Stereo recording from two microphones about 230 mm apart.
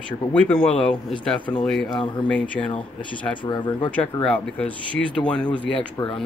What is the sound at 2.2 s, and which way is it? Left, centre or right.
Speech, centre.